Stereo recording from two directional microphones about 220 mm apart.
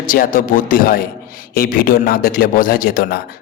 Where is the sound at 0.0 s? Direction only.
40° left (ahead or behind).